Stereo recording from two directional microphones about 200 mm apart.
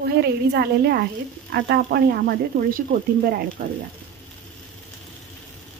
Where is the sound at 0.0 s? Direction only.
55° right (ahead or behind).